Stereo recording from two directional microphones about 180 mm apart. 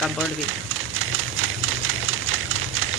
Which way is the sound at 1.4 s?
90° right.